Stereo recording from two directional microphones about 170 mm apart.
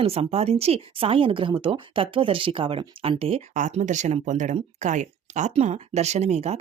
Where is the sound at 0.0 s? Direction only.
35° right (ahead or behind).